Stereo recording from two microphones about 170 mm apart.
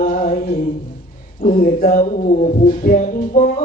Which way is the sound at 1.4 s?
55° left (ahead or behind).